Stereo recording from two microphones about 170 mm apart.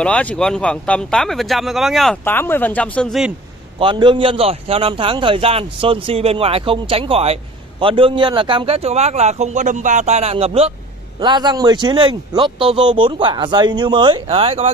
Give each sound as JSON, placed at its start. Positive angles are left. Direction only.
{"t": 0.0, "sound": "speech", "side_deg": 10}
{"t": 2.2, "sound": "speech", "side_deg": 10}
{"t": 3.8, "sound": "a man's voice", "side_deg": -30}